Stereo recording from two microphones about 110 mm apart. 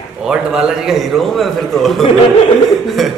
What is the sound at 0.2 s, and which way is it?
A man's voice, 5° right (ahead or behind).